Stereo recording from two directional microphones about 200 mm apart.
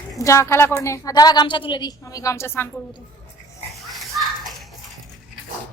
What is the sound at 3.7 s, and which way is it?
Children playing, centre (ahead or behind).